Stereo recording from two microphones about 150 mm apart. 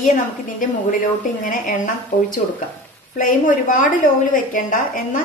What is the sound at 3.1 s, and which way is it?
A woman's voice, 60° left (ahead or behind).